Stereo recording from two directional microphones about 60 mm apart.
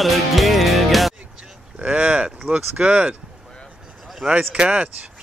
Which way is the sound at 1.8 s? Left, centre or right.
Centre.